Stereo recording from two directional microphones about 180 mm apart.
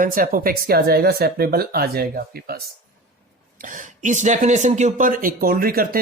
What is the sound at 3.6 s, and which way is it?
Speech, 45° right (ahead or behind).